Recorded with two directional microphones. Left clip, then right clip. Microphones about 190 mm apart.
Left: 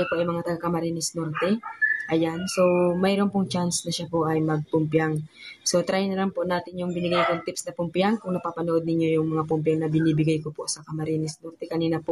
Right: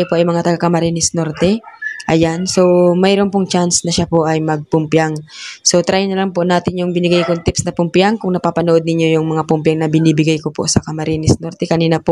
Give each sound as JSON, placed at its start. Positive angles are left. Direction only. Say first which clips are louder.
{"t": 0.0, "sound": "speech", "louder": "right 11 dB", "side_deg": -45}